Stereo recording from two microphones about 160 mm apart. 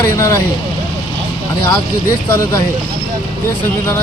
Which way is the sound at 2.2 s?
15° left (ahead or behind).